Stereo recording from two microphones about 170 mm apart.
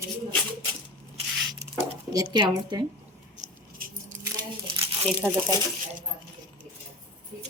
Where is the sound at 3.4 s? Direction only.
55° right (ahead or behind).